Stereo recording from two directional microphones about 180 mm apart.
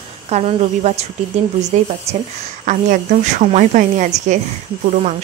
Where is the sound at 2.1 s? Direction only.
35° right (ahead or behind).